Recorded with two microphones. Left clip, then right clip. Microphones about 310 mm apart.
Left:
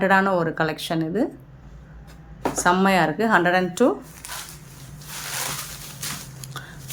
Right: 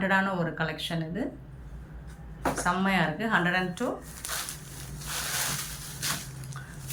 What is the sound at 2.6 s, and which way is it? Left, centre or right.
Speech, centre.